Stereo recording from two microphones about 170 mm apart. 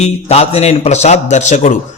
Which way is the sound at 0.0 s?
35° left (ahead or behind).